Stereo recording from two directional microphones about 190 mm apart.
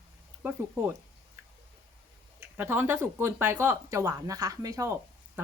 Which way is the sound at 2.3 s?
10° right (ahead or behind).